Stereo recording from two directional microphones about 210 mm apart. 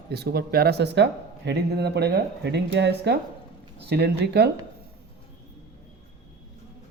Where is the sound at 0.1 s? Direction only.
50° right (ahead or behind).